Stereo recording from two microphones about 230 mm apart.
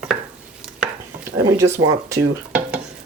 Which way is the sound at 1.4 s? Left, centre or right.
Centre.